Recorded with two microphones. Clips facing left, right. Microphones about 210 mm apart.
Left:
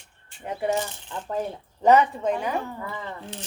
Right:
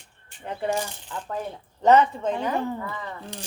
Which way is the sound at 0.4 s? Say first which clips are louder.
Left 1 dB; 15° left (ahead or behind).